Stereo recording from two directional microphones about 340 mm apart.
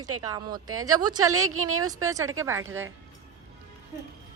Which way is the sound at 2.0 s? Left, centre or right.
Centre.